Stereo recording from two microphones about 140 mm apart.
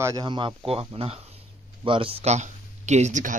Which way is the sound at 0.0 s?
30° right (ahead or behind).